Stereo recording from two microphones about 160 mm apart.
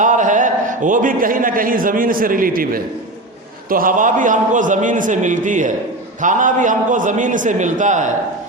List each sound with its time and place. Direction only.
0.0 s a man's voice: 50° right (ahead or behind)